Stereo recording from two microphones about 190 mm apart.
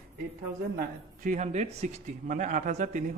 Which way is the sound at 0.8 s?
45° right (ahead or behind).